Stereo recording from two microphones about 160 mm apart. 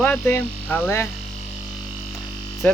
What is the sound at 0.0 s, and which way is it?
Speech, 10° left (ahead or behind).